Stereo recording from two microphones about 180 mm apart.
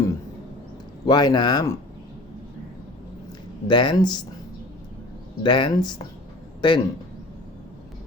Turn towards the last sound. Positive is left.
turn(degrees=25)  # may be behind; listen again after turning